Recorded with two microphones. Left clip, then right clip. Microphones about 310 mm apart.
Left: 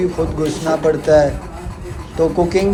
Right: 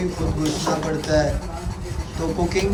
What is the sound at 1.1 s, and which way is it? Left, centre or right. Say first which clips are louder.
Speech: left 9 dB; centre.